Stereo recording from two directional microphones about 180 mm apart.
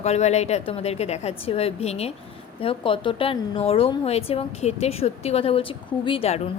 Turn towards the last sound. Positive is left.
turn(degrees=35)  # may be behind; listen again after turning